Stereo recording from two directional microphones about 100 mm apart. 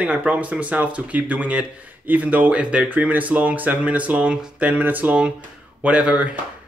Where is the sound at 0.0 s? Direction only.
10° right (ahead or behind).